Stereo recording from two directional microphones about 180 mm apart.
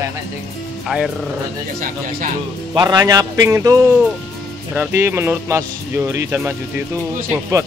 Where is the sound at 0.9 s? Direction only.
Centre (ahead or behind).